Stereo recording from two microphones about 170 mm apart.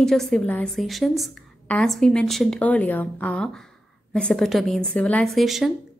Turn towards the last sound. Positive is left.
turn(degrees=0)  # may be behind; listen again after turning